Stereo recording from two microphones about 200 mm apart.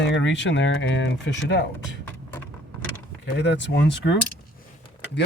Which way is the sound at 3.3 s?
60° left (ahead or behind).